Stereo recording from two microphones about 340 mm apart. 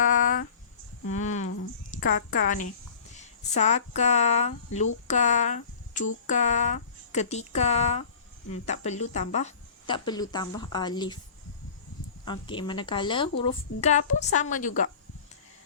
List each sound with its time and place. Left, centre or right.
0.0 s a sound: left
2.0 s speech: left
12.2 s speech: centre